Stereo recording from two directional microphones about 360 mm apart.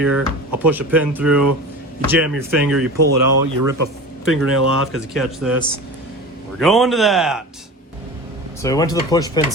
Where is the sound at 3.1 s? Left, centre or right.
Right.